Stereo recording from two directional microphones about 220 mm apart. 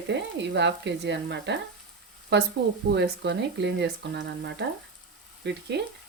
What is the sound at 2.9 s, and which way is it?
Speech, 50° right (ahead or behind).